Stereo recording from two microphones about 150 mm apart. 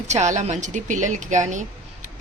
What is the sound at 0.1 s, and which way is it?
A woman's voice, 50° right (ahead or behind).